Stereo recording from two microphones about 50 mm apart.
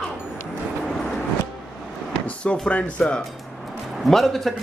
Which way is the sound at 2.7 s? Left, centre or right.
Left.